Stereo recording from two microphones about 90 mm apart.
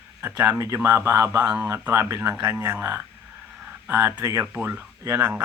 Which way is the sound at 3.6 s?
20° right (ahead or behind).